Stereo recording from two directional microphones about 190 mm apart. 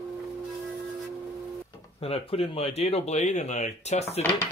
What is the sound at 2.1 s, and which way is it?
Speech, 30° left (ahead or behind).